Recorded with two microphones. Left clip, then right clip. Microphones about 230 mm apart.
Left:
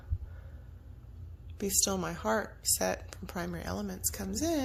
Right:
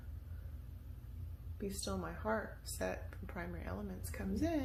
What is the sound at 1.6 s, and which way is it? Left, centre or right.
Speech, left.